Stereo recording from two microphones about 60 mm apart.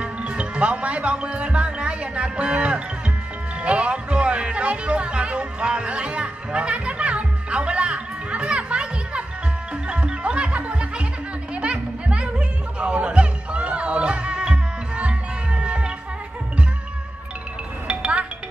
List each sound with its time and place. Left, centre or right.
0.0 s speech: centre
9.8 s music: centre
17.8 s music: centre